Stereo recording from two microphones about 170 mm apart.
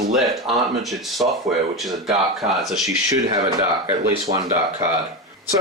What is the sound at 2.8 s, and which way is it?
Speech, 20° right (ahead or behind).